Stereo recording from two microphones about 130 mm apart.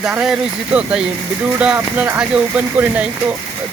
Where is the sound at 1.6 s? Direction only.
10° right (ahead or behind).